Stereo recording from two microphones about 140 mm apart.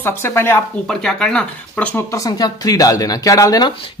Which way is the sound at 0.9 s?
5° left (ahead or behind).